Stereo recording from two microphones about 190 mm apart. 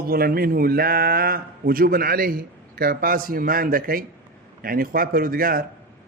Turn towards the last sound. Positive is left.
turn(degrees=-50)  # may be behind; listen again after turning